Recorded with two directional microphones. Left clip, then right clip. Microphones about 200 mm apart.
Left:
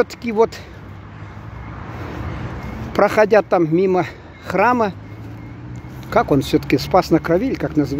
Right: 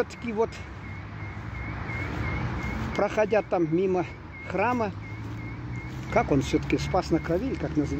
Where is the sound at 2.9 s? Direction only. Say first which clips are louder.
Left 11 dB; 35° left (ahead or behind).